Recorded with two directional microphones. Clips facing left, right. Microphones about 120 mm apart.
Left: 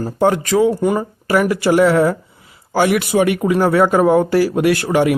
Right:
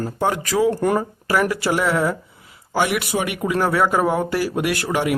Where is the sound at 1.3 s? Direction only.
25° left (ahead or behind).